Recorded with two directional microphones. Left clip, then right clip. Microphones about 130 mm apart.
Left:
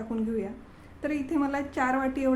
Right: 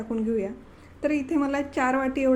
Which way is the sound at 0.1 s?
25° right (ahead or behind).